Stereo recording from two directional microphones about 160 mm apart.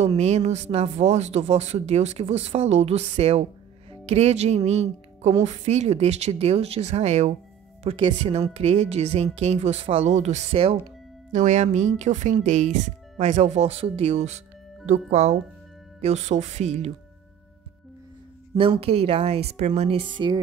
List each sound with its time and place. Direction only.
0.0 s speech: 45° right (ahead or behind)
18.5 s speech: 35° right (ahead or behind)